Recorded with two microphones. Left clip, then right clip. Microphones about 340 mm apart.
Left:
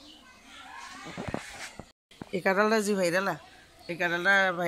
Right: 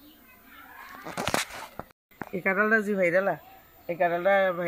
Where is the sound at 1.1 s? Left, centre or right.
Right.